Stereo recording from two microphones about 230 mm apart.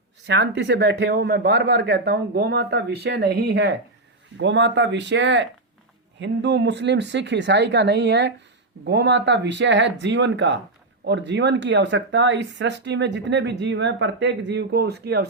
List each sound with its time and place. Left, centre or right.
0.3 s speech: right